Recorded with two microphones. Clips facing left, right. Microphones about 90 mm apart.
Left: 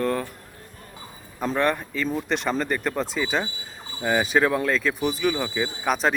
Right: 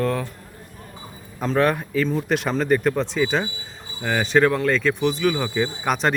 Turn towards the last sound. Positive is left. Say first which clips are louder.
# right 1 dB
turn(degrees=0)  # may be behind; listen again after turning